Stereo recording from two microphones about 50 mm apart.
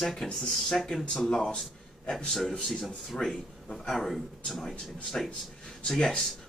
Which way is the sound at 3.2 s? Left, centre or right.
Centre.